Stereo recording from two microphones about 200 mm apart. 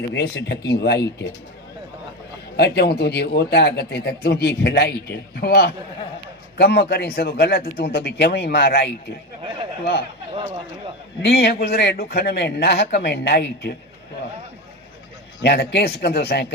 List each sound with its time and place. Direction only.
0.1 s a man's voice: 60° left (ahead or behind)
2.6 s a man's voice: 55° left (ahead or behind)
11.2 s a man's voice: 55° left (ahead or behind)
15.4 s a man's voice: 55° left (ahead or behind)